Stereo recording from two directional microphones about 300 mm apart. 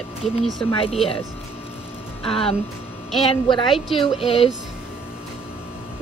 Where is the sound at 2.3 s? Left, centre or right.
Centre.